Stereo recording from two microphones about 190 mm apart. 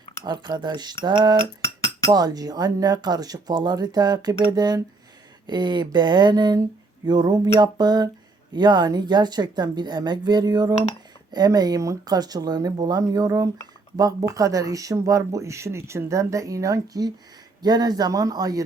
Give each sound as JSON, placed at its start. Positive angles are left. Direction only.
{"t": 0.3, "sound": "speech", "side_deg": -20}